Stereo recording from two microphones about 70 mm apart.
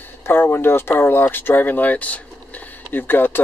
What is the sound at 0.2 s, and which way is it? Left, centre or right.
Speech, left.